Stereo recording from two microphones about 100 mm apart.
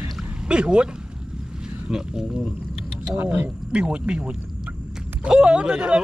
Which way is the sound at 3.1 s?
20° right (ahead or behind).